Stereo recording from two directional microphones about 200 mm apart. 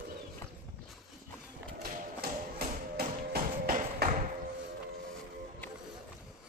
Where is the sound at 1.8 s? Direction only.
45° right (ahead or behind).